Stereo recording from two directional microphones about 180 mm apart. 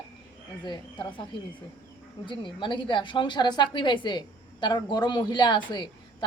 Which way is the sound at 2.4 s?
25° left (ahead or behind).